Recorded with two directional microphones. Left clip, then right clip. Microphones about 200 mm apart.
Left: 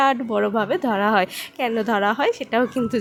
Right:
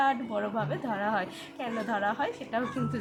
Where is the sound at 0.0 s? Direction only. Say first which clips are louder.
Left 9 dB; 45° left (ahead or behind).